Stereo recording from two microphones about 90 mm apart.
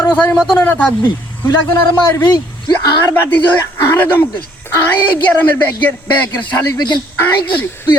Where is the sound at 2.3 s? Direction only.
50° left (ahead or behind).